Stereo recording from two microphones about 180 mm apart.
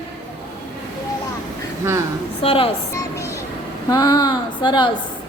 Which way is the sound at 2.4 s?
30° left (ahead or behind).